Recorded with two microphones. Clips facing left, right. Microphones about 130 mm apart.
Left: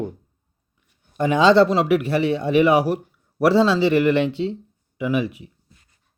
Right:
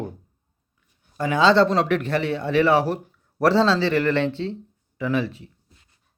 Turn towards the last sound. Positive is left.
turn(degrees=15)  # may be behind; listen again after turning